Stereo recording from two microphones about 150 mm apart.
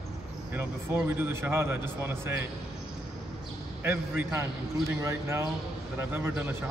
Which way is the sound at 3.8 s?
15° right (ahead or behind).